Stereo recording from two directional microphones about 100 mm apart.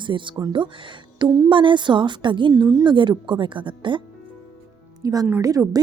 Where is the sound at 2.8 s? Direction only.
50° right (ahead or behind).